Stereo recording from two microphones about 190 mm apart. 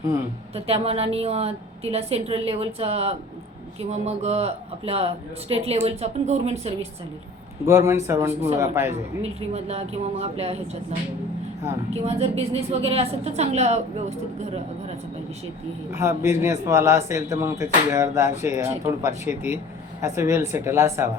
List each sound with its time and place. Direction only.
0.5 s speech: 30° right (ahead or behind)
7.6 s a man's voice: 15° right (ahead or behind)
9.2 s speech: 35° right (ahead or behind)
12.0 s speech: 30° right (ahead or behind)
15.9 s a man's voice: 15° right (ahead or behind)